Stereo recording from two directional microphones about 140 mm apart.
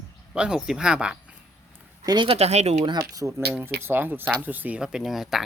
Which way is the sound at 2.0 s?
30° right (ahead or behind).